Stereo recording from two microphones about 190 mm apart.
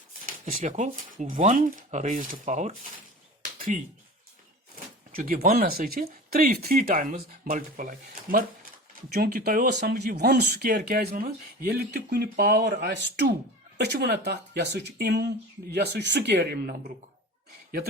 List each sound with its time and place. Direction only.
0.3 s speech: 45° right (ahead or behind)
5.1 s speech: 45° right (ahead or behind)